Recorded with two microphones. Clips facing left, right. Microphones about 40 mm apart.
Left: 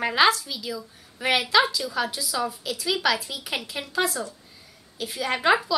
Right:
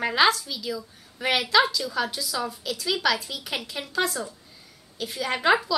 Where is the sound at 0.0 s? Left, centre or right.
Centre.